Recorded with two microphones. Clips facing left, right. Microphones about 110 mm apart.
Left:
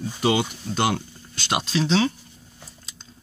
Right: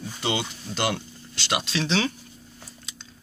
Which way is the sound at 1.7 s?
35° left (ahead or behind).